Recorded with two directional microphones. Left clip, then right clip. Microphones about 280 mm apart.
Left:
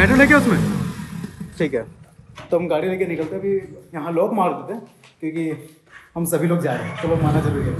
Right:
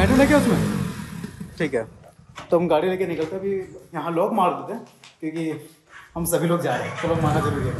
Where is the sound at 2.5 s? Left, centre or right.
Centre.